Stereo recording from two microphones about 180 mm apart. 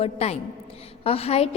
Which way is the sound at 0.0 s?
35° left (ahead or behind).